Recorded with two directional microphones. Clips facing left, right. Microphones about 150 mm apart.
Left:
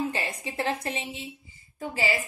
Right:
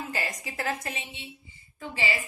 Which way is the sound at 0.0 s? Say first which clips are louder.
Left 4 dB; 30° left (ahead or behind).